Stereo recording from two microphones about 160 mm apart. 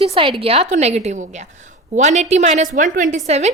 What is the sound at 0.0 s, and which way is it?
A woman's voice, 35° right (ahead or behind).